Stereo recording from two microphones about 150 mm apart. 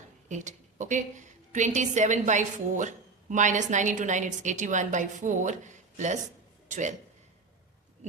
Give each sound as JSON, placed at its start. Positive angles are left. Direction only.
{"t": 0.3, "sound": "a woman's voice", "side_deg": -55}